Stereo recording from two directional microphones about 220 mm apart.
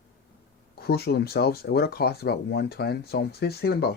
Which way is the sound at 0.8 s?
45° left (ahead or behind).